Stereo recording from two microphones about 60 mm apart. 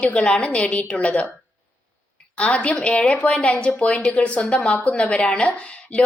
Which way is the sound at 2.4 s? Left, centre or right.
Centre.